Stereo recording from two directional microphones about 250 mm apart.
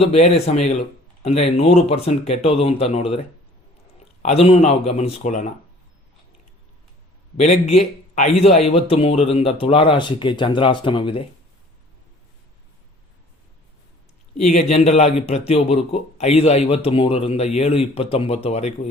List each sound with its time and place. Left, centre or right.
0.0 s a man's voice: left
4.2 s a man's voice: left
7.3 s a man's voice: left
14.3 s a man's voice: left